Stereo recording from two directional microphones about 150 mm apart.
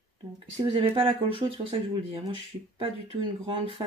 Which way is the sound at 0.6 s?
35° right (ahead or behind).